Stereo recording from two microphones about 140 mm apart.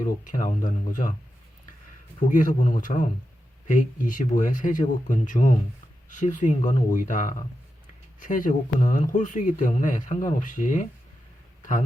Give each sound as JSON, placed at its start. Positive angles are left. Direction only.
{"t": 0.0, "sound": "speech", "side_deg": 65}
{"t": 2.1, "sound": "speech", "side_deg": 70}